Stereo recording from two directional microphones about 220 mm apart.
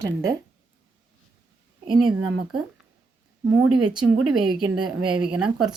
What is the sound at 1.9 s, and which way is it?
Speech, 20° right (ahead or behind).